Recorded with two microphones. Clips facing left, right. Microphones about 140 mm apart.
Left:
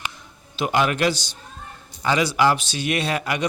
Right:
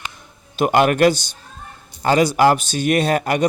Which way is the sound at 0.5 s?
50° right (ahead or behind).